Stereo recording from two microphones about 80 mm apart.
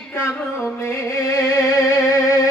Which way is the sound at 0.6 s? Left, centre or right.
Left.